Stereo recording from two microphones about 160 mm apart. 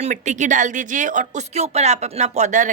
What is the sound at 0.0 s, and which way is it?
Speech, 50° right (ahead or behind).